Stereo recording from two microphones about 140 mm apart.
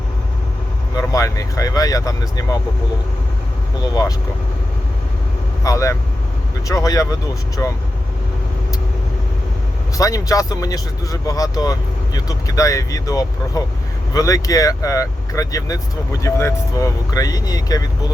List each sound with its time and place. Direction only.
0.9 s speech: 25° left (ahead or behind)
5.6 s speech: 25° left (ahead or behind)
10.0 s speech: 25° left (ahead or behind)